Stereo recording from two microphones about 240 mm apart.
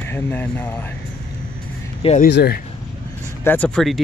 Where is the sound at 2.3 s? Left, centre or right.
Left.